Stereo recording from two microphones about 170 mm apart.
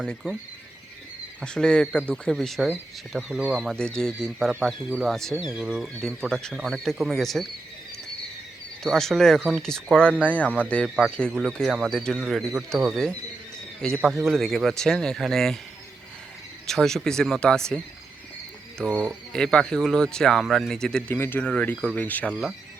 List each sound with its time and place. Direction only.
0.0 s a man's voice: 5° left (ahead or behind)
1.4 s a man's voice: 5° left (ahead or behind)
8.8 s a man's voice: centre (ahead or behind)
13.8 s a man's voice: centre (ahead or behind)
16.6 s a man's voice: centre (ahead or behind)
18.8 s a man's voice: 5° left (ahead or behind)